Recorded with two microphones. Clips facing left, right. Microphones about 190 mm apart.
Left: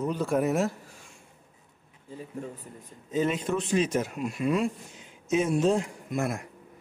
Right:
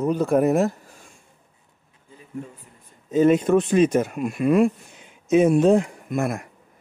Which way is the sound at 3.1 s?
50° right (ahead or behind).